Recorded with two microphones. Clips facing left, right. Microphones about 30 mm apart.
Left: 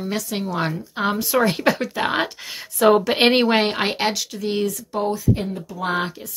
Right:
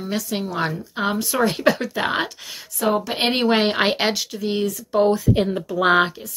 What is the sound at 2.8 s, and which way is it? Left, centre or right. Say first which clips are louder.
Speech: left 6 dB; left.